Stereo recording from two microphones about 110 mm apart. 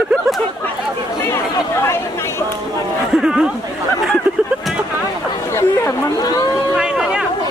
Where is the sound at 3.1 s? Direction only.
5° right (ahead or behind).